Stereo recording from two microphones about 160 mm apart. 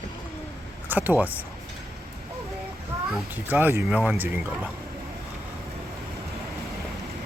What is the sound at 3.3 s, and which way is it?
Speech, 10° right (ahead or behind).